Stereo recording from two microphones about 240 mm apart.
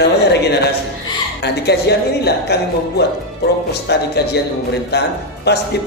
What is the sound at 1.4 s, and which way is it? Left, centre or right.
Speech, left.